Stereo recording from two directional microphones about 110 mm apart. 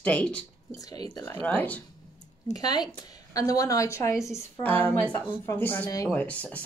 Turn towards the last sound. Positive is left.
turn(degrees=15)  # may be behind; listen again after turning